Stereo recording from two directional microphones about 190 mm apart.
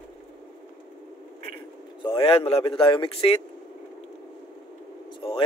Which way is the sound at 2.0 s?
30° left (ahead or behind).